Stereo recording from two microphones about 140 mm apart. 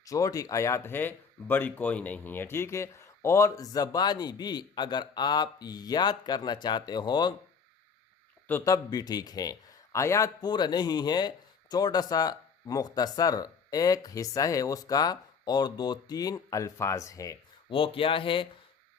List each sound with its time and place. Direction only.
0.0 s a man's voice: 25° left (ahead or behind)
8.4 s a man's voice: 20° left (ahead or behind)
17.7 s speech: 40° left (ahead or behind)